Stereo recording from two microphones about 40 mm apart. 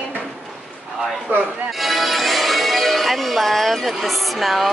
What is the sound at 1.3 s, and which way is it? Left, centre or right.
Speech, right.